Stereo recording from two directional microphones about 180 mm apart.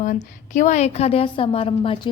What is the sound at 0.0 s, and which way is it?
A woman's voice, 45° left (ahead or behind).